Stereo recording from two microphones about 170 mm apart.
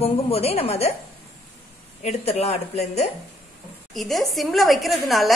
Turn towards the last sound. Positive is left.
turn(degrees=0)  # may be behind; listen again after turning